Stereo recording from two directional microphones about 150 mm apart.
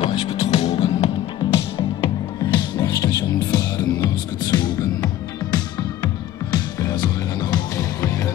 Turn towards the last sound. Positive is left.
turn(degrees=25)  # may be behind; listen again after turning